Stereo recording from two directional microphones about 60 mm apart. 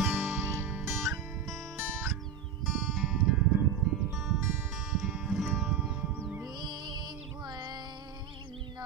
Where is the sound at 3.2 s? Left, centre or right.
Centre.